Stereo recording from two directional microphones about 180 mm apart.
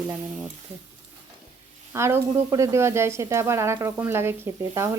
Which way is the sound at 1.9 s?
15° right (ahead or behind).